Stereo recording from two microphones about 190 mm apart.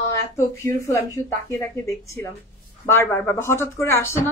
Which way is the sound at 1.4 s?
15° left (ahead or behind).